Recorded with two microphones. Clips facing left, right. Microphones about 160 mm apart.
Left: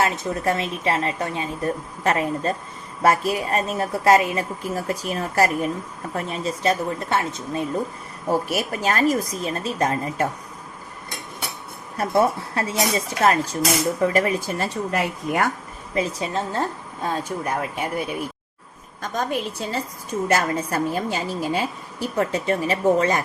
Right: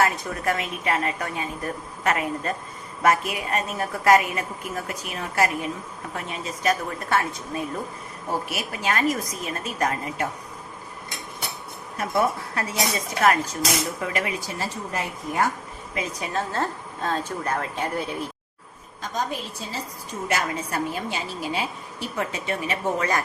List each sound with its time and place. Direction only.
0.0 s a woman's voice: 30° left (ahead or behind)
8.4 s a woman's voice: 40° left (ahead or behind)
11.9 s a woman's voice: 30° left (ahead or behind); by 15.4 s 70° left (ahead or behind)
16.0 s a woman's voice: 25° left (ahead or behind)
19.1 s a woman's voice: 55° left (ahead or behind)
20.2 s a woman's voice: 40° left (ahead or behind)